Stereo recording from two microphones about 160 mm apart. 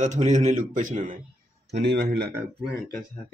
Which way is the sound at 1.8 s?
90° right.